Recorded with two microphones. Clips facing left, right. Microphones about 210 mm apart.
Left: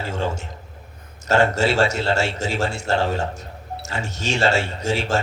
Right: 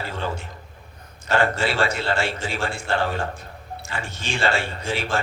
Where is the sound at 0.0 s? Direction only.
45° left (ahead or behind).